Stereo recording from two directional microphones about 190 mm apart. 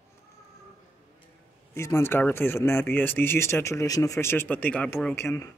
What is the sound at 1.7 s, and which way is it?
Speech, 15° left (ahead or behind).